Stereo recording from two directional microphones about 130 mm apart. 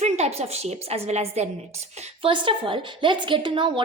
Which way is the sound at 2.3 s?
40° right (ahead or behind).